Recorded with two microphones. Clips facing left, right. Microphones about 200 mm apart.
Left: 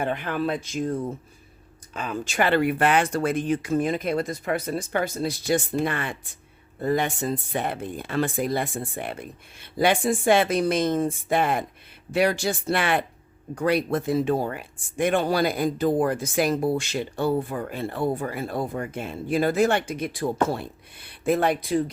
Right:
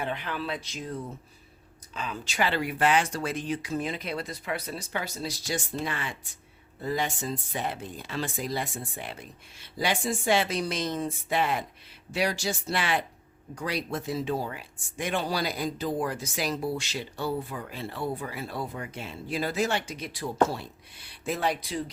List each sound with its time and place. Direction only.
0.0 s speech: 50° left (ahead or behind)